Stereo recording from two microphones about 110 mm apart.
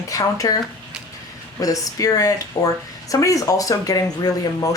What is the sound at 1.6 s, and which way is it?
Speech, 30° left (ahead or behind).